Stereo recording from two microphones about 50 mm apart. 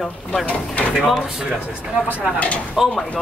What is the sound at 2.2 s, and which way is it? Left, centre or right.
Speech, left.